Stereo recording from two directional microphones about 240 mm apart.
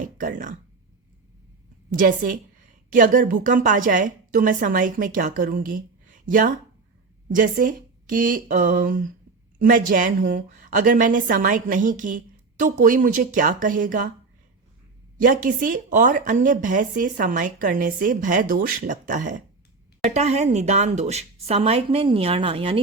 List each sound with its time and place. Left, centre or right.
0.0 s speech: right
2.0 s speech: right
15.2 s speech: right